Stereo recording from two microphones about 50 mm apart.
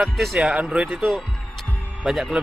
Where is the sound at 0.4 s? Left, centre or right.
Centre.